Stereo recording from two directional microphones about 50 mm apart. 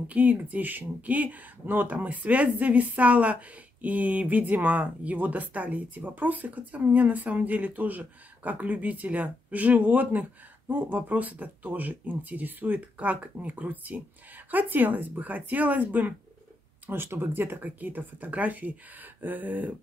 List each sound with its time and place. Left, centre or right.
0.1 s speech: right
16.8 s speech: right